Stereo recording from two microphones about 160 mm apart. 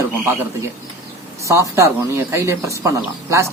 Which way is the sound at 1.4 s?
20° right (ahead or behind).